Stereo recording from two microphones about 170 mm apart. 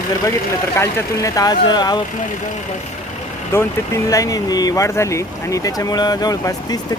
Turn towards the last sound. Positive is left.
turn(degrees=20)  # may be behind; listen again after turning